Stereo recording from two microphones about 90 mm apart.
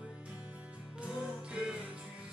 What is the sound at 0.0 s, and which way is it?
Music, 10° right (ahead or behind).